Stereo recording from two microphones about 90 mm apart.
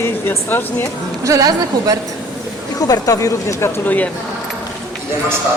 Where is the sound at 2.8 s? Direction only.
40° left (ahead or behind).